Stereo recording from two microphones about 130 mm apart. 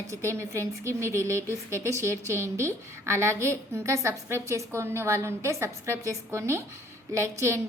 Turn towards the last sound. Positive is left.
turn(degrees=-20)  # may be behind; listen again after turning